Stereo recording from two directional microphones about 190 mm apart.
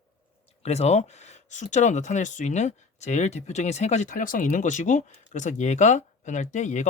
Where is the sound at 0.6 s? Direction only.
35° left (ahead or behind).